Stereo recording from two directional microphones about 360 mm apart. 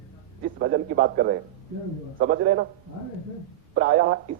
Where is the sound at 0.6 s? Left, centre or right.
Right.